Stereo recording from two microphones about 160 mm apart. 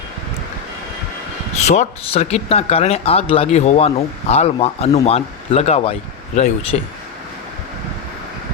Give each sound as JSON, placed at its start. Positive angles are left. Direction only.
{"t": 1.5, "sound": "speech", "side_deg": 45}